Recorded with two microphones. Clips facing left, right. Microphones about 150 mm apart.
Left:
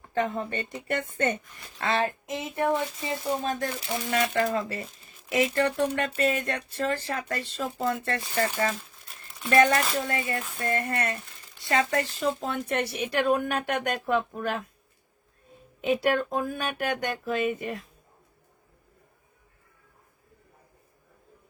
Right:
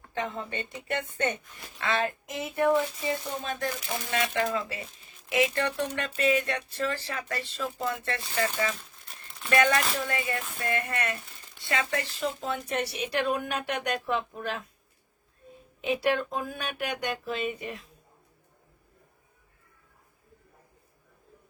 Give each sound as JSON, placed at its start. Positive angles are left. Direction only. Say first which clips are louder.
{"t": 0.1, "sound": "speech", "louder": "left 5 dB", "side_deg": 55}
{"t": 1.8, "sound": "a sound", "louder": "left 2 dB", "side_deg": 35}
{"t": 3.4, "sound": "speech", "louder": "left 3 dB", "side_deg": 40}
{"t": 9.5, "sound": "speech", "louder": "left 3 dB", "side_deg": 35}
{"t": 15.8, "sound": "speech", "louder": "left 2 dB", "side_deg": 45}